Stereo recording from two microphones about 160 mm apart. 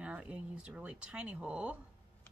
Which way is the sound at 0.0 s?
5° right (ahead or behind).